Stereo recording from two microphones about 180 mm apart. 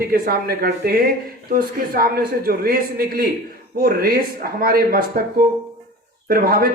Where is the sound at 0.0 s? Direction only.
55° right (ahead or behind).